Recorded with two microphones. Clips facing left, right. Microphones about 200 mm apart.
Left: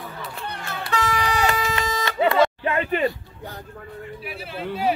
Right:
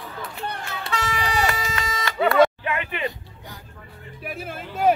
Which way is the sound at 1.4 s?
25° left (ahead or behind).